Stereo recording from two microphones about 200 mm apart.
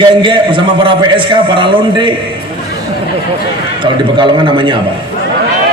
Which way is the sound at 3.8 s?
25° right (ahead or behind).